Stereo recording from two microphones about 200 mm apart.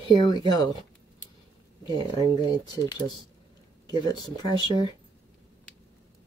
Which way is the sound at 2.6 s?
20° left (ahead or behind).